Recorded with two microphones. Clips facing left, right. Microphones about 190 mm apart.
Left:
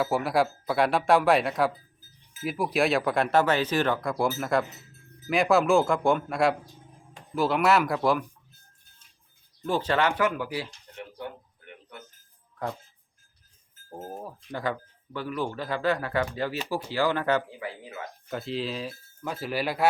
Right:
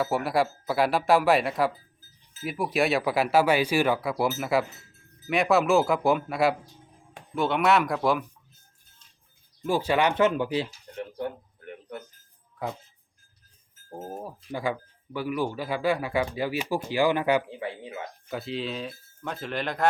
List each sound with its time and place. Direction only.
0.0 s speech: centre (ahead or behind)
9.6 s speech: 10° right (ahead or behind)
10.9 s a sound: 45° right (ahead or behind)
13.9 s speech: 10° right (ahead or behind)
17.6 s speech: 25° right (ahead or behind)
18.3 s speech: centre (ahead or behind)